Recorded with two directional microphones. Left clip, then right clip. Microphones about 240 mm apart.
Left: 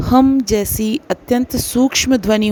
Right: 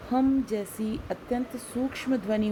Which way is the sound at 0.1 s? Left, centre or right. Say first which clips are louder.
Left 13 dB; left.